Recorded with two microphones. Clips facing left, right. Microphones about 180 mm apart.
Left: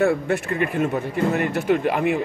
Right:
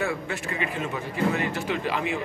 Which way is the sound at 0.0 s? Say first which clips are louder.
Left 9 dB; 55° left (ahead or behind).